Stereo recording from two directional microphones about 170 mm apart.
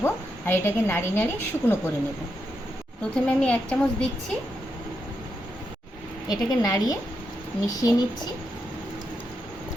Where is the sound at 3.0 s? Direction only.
5° left (ahead or behind).